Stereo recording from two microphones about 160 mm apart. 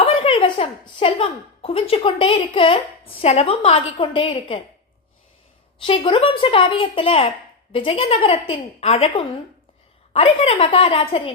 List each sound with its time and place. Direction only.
0.0 s a woman's voice: 35° left (ahead or behind)
5.8 s speech: 35° left (ahead or behind)